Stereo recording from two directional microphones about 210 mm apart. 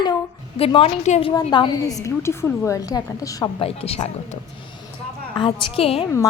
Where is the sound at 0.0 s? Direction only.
25° left (ahead or behind).